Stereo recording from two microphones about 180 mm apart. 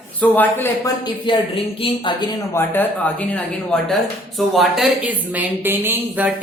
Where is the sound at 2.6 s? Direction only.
10° left (ahead or behind).